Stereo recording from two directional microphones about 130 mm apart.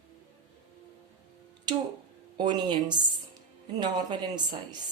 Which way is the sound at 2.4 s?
35° right (ahead or behind).